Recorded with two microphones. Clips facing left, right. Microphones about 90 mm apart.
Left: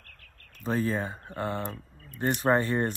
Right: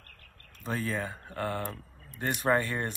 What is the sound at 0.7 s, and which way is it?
Speech, 30° left (ahead or behind).